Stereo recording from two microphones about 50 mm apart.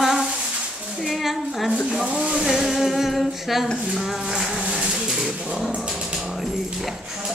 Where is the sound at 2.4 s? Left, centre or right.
Centre.